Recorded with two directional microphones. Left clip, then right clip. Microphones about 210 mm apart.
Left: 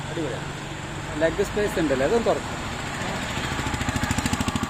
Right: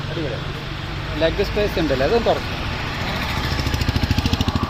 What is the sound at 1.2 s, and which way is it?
Speech, 10° left (ahead or behind).